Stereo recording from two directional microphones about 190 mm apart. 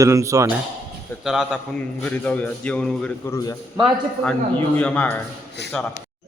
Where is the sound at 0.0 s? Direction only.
15° right (ahead or behind).